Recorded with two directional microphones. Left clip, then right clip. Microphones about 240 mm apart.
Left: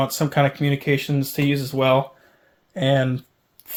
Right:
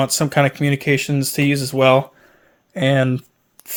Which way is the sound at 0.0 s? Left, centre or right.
Right.